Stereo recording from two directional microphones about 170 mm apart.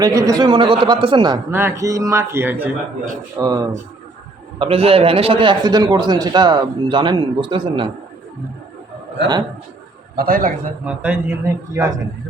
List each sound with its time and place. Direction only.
0.0 s a man's voice: 20° right (ahead or behind)
1.5 s a man's voice: 15° right (ahead or behind)
4.6 s a man's voice: 35° right (ahead or behind)
10.2 s a man's voice: 60° right (ahead or behind)
10.8 s a man's voice: 10° right (ahead or behind)